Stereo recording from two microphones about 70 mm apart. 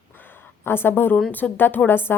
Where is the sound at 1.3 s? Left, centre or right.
Left.